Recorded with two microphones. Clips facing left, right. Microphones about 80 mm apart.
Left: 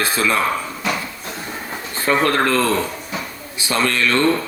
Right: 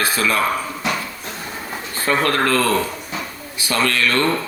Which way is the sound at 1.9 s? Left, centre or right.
Left.